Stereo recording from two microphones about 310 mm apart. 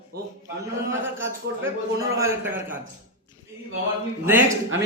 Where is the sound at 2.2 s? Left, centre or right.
Centre.